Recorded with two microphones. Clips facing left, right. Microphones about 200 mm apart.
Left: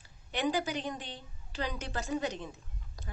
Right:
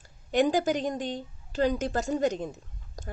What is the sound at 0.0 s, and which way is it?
A woman's voice, 45° right (ahead or behind).